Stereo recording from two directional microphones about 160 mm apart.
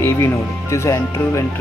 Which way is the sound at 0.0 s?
15° left (ahead or behind).